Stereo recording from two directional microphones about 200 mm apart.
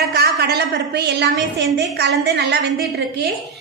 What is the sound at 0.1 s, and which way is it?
A woman's voice, 55° right (ahead or behind).